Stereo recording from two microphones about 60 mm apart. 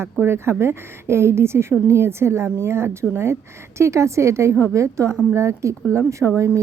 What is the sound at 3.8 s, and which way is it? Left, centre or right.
A woman's voice, right.